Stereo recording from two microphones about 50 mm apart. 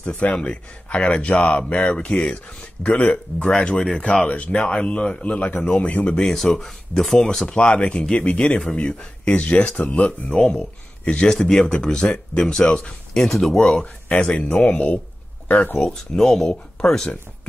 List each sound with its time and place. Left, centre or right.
0.0 s speech: left
5.6 s speech: centre
5.9 s speech: left
6.1 s speech: centre
7.4 s speech: centre
10.3 s speech: left
11.2 s speech: centre
13.7 s speech: left
15.8 s speech: centre